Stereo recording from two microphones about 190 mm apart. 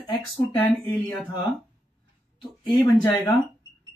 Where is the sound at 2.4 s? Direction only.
15° left (ahead or behind).